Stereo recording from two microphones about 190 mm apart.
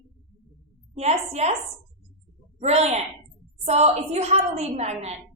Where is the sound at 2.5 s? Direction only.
35° right (ahead or behind).